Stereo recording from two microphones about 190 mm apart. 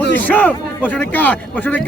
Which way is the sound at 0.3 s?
10° left (ahead or behind).